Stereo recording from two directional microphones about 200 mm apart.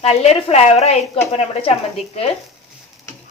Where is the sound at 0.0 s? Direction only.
30° left (ahead or behind).